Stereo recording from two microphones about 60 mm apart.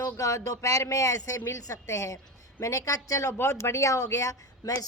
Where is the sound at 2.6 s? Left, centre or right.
Left.